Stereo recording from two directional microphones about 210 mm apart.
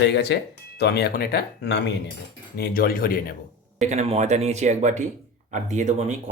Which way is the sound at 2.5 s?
45° left (ahead or behind).